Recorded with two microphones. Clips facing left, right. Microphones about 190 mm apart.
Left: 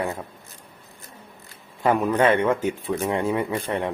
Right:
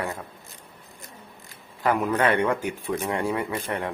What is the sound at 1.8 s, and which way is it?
A man's voice, 20° left (ahead or behind).